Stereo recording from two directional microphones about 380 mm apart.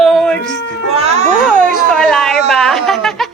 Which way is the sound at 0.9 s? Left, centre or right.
Centre.